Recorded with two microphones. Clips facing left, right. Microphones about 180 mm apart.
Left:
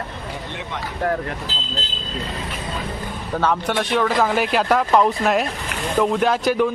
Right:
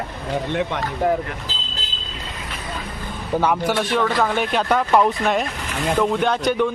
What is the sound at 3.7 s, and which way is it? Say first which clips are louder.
Speech: left 1 dB; centre (ahead or behind).